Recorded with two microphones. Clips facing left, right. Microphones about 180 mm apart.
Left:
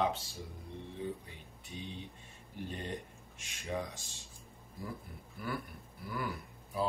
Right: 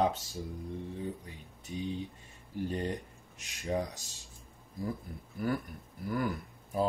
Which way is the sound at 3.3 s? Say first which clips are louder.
Right 5 dB; 40° right (ahead or behind).